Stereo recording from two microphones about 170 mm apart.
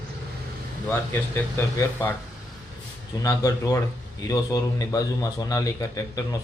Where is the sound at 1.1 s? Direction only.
15° left (ahead or behind).